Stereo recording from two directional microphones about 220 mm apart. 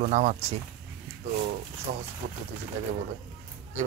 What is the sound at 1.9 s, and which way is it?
Speech, 40° right (ahead or behind).